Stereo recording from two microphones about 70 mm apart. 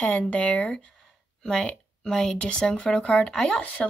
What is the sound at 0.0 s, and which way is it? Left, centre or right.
Speech, centre.